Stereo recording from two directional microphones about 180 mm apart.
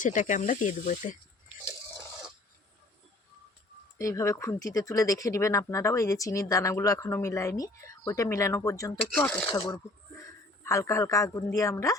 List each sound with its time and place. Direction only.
0.0 s speech: 45° left (ahead or behind)
3.9 s speech: 15° left (ahead or behind)
9.1 s speech: 5° left (ahead or behind)
9.5 s speech: 25° left (ahead or behind)